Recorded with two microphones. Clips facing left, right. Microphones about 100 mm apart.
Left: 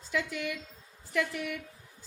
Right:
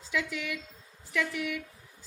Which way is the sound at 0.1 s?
40° left (ahead or behind).